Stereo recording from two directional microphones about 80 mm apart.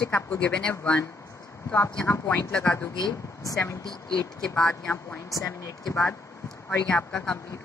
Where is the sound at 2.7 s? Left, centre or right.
Centre.